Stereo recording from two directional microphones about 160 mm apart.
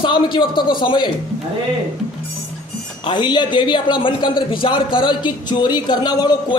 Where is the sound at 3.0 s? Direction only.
30° left (ahead or behind).